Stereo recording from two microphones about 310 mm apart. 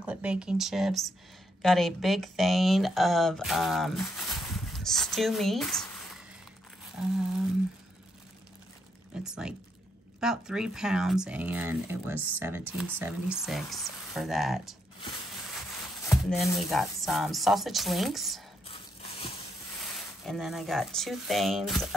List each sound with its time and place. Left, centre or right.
0.0 s speech: centre
7.0 s speech: centre
9.2 s speech: centre
16.1 s speech: centre
18.7 s a sound: centre
19.8 s speech: centre